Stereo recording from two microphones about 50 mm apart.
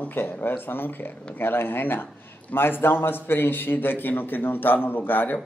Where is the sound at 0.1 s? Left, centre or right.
Left.